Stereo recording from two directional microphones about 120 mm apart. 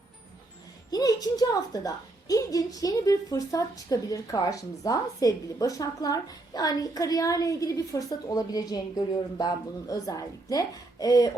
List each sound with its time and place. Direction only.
0.9 s a woman's voice: 35° left (ahead or behind)